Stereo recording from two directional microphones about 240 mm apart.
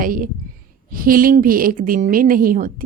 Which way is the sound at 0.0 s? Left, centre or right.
Right.